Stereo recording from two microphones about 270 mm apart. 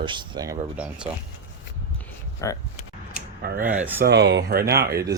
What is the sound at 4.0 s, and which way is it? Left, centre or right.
Speech, right.